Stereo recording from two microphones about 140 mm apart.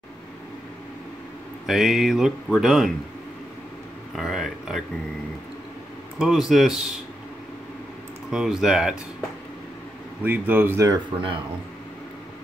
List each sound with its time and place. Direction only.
1.7 s speech: 5° right (ahead or behind)
4.1 s speech: centre (ahead or behind)
6.1 s speech: 5° right (ahead or behind)
8.3 s speech: 5° right (ahead or behind)
10.2 s a man's voice: 15° right (ahead or behind)
11.1 s speech: 35° right (ahead or behind)